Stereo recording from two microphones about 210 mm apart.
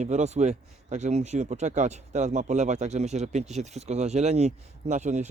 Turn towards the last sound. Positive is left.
turn(degrees=-35)  # may be behind; listen again after turning